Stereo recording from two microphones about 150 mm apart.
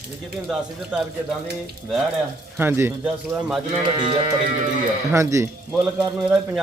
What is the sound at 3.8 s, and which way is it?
Music, 35° right (ahead or behind).